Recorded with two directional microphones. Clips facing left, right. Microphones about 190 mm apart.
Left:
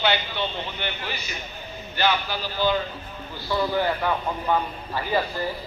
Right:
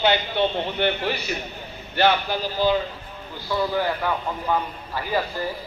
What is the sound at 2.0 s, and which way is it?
Speech, 55° right (ahead or behind).